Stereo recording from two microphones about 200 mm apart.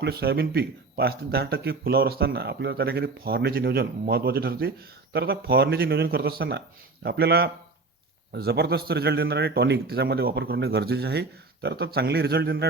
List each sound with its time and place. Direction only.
0.0 s a man's voice: 50° right (ahead or behind)